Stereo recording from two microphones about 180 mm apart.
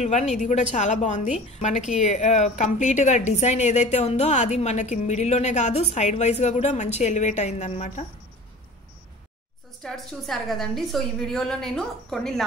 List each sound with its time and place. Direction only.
0.0 s speech: 40° left (ahead or behind)
9.8 s a woman's voice: centre (ahead or behind)